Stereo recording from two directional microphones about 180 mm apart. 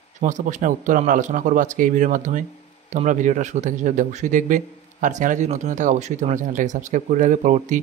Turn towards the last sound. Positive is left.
turn(degrees=-45)  # may be behind; listen again after turning